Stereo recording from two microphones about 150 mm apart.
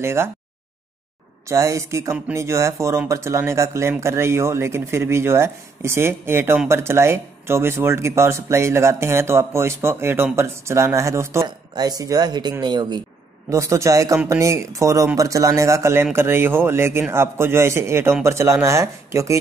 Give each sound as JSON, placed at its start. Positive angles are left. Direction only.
{"t": 0.0, "sound": "speech", "side_deg": -15}
{"t": 1.5, "sound": "speech", "side_deg": -20}